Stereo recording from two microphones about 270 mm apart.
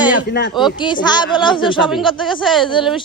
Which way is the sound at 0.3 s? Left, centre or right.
Left.